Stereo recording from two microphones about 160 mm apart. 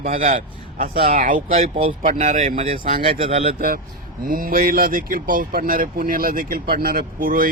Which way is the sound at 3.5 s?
65° right (ahead or behind).